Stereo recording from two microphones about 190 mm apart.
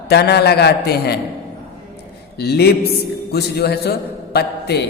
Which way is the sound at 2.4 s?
55° left (ahead or behind).